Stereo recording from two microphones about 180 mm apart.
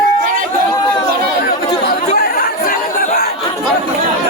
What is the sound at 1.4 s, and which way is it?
Chatter, 60° left (ahead or behind).